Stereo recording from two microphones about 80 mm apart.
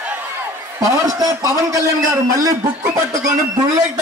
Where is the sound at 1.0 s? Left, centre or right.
Right.